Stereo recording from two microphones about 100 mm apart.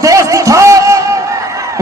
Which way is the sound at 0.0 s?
35° right (ahead or behind).